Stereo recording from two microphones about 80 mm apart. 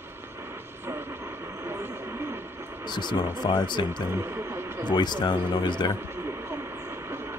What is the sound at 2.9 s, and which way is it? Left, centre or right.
Speech, left.